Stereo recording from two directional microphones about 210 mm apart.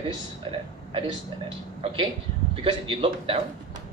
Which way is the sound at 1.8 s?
25° right (ahead or behind).